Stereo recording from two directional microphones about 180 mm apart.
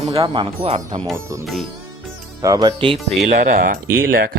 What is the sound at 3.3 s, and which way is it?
Speech, 45° right (ahead or behind).